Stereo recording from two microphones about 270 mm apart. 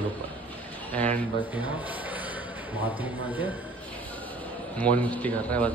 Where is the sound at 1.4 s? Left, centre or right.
Centre.